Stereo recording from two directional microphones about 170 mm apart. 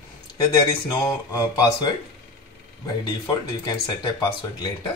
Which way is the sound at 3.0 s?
25° left (ahead or behind).